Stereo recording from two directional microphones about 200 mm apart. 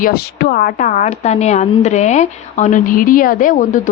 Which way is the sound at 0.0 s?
50° left (ahead or behind).